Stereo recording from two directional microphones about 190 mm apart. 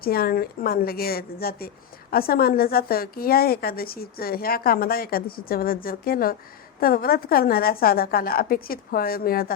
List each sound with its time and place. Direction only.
0.0 s a woman's voice: 50° left (ahead or behind)